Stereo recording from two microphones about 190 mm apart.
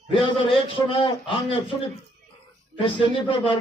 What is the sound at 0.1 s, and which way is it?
A man's voice, 25° left (ahead or behind).